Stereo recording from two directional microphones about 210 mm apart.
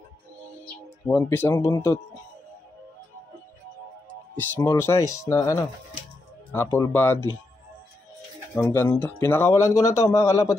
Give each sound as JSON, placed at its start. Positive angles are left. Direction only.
{"t": 1.0, "sound": "speech", "side_deg": 10}
{"t": 4.4, "sound": "speech", "side_deg": 10}
{"t": 6.5, "sound": "speech", "side_deg": 10}
{"t": 8.5, "sound": "speech", "side_deg": 15}